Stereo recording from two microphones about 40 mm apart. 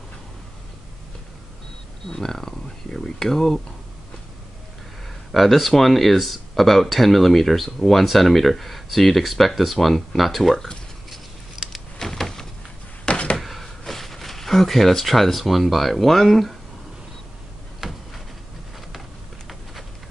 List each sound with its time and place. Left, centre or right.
2.0 s speech: centre
5.3 s speech: centre
11.7 s power windows: centre
13.0 s a sound: left
13.4 s speech: centre
17.7 s a sound: centre